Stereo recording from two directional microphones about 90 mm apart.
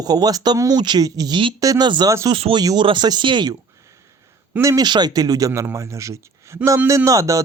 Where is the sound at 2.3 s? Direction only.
80° right.